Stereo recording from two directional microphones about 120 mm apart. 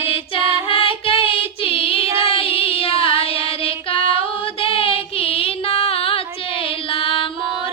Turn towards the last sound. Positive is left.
turn(degrees=50)  # may be behind; listen again after turning